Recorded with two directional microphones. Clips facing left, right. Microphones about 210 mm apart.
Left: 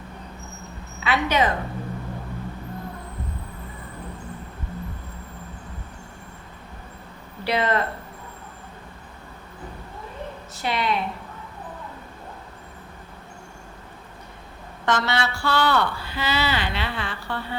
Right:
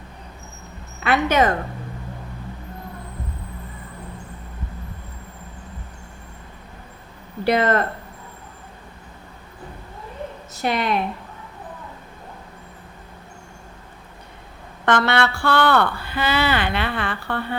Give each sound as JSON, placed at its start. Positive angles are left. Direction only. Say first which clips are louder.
{"t": 1.0, "sound": "speech", "louder": "right 4 dB", "side_deg": -50}
{"t": 7.4, "sound": "speech", "louder": "right 5 dB", "side_deg": -50}
{"t": 10.6, "sound": "speech", "louder": "right 3 dB", "side_deg": -50}
{"t": 14.8, "sound": "speech", "louder": "right 5 dB", "side_deg": -60}